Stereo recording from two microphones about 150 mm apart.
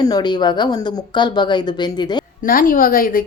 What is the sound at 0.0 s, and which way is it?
A woman's voice, 25° left (ahead or behind).